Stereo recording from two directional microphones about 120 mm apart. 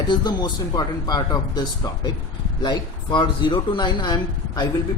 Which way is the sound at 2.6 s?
40° left (ahead or behind).